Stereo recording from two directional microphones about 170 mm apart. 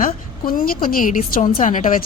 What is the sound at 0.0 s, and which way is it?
A woman's voice, 55° left (ahead or behind).